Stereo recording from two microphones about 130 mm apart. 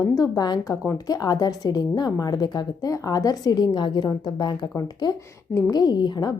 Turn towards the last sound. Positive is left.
turn(degrees=35)  # may be behind; listen again after turning